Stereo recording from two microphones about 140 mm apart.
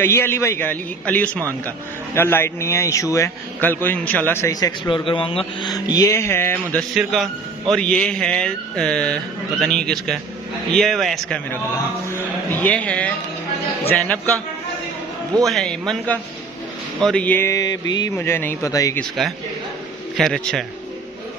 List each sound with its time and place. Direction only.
0.0 s a man's voice: 15° left (ahead or behind); by 5.7 s 40° left (ahead or behind)
5.7 s a man's voice: 25° left (ahead or behind)
6.9 s a man's voice: centre (ahead or behind)
15.4 s a man's voice: centre (ahead or behind); by 18.9 s 25° left (ahead or behind)
18.9 s a man's voice: centre (ahead or behind)